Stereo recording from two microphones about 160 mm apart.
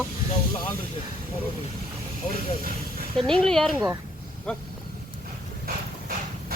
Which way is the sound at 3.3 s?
5° left (ahead or behind).